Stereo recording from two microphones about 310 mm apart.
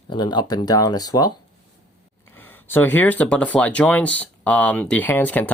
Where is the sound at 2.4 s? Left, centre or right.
Centre.